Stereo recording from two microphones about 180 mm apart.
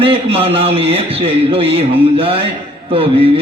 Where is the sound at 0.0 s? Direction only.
30° right (ahead or behind).